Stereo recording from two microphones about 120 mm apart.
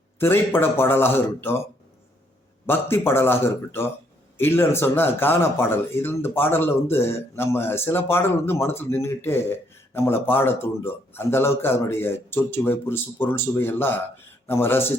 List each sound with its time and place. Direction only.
0.2 s speech: 20° left (ahead or behind)
2.6 s speech: 20° left (ahead or behind)